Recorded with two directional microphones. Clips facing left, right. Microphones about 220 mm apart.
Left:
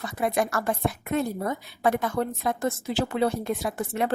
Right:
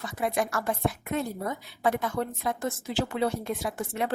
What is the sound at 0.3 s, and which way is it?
A woman's voice, 60° left (ahead or behind).